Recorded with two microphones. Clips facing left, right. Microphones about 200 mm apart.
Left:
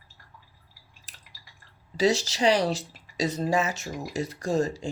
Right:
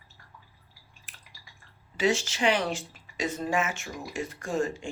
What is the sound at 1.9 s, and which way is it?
Speech, 35° left (ahead or behind).